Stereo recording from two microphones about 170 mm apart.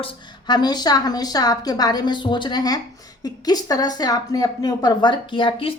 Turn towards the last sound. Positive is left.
turn(degrees=30)  # may be behind; listen again after turning